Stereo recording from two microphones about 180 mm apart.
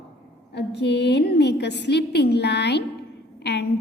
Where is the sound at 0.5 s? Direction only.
70° left (ahead or behind).